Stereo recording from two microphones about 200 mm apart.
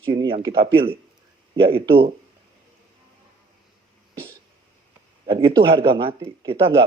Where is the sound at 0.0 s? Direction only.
25° right (ahead or behind).